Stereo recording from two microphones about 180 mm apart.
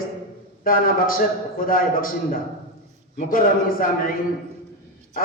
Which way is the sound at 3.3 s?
50° left (ahead or behind).